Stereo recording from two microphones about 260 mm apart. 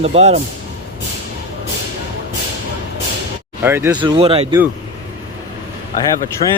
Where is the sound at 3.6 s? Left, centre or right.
Centre.